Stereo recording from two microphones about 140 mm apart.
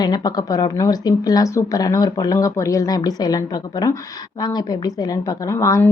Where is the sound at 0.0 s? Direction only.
30° left (ahead or behind).